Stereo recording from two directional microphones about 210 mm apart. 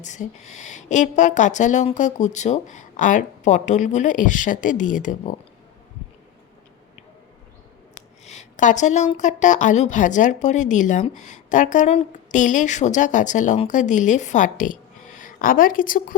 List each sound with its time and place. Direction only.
0.0 s a woman's voice: 35° left (ahead or behind)
8.2 s a woman's voice: 35° left (ahead or behind)